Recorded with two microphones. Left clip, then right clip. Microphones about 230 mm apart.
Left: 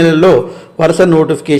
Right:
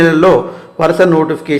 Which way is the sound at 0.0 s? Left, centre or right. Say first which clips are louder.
Left 1 dB; left.